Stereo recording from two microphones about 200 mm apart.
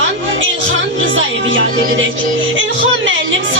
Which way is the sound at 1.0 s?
75° right (ahead or behind).